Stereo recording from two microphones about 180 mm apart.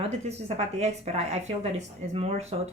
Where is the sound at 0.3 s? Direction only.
35° right (ahead or behind).